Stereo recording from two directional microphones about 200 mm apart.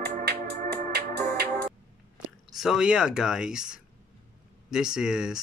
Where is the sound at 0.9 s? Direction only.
50° right (ahead or behind).